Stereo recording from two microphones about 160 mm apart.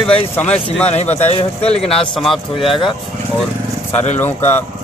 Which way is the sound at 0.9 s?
45° left (ahead or behind).